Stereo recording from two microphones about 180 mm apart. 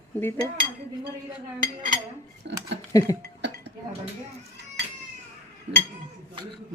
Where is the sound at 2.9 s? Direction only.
20° left (ahead or behind).